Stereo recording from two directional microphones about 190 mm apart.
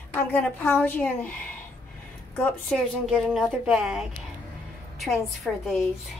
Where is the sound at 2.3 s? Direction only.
5° left (ahead or behind).